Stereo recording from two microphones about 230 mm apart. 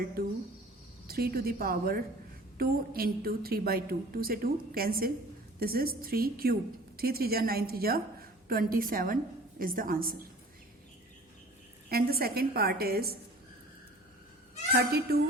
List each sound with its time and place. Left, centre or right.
0.2 s a woman's voice: right
11.9 s a woman's voice: right
14.7 s speech: right